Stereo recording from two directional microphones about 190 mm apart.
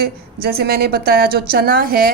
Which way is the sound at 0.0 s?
55° right (ahead or behind).